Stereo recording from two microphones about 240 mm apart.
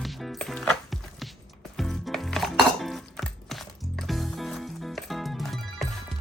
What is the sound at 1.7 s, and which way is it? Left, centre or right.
Dishes, centre.